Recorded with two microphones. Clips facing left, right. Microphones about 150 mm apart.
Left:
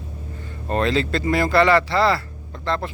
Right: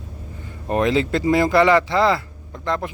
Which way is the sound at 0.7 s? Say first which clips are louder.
Right 2 dB; 15° right (ahead or behind).